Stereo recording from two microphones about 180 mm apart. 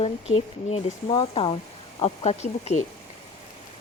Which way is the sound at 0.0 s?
35° left (ahead or behind).